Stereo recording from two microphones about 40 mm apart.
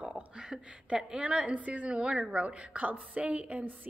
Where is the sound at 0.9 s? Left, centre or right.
Right.